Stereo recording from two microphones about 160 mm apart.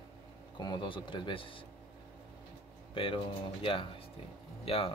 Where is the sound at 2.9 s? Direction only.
35° left (ahead or behind).